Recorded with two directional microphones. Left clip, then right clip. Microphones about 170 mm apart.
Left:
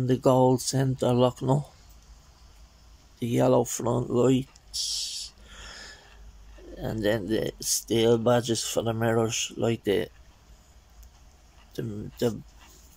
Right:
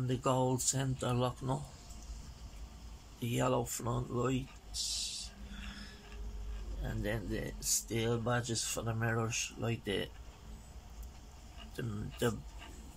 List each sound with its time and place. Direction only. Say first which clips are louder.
0.0 s speech: left 12 dB; 35° left (ahead or behind)
3.2 s speech: left 11 dB; 30° left (ahead or behind)
6.8 s speech: left 13 dB; 45° left (ahead or behind)
11.7 s speech: left 8 dB; 25° left (ahead or behind)